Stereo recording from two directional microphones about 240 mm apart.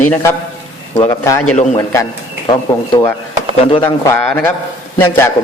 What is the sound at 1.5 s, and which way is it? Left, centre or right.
Speech, left.